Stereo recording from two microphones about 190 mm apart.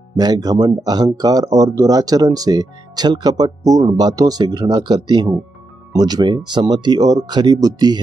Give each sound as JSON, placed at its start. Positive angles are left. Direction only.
{"t": 0.1, "sound": "speech", "side_deg": -20}